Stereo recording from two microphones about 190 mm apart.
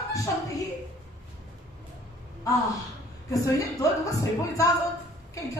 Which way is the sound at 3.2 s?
15° left (ahead or behind).